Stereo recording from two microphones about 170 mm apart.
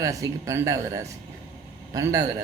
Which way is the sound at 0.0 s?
20° right (ahead or behind).